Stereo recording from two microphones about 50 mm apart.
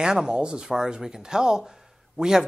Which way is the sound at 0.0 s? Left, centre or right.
Centre.